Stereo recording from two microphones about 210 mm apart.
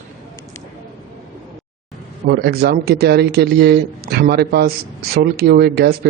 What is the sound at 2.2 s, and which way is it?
Speech, 50° right (ahead or behind).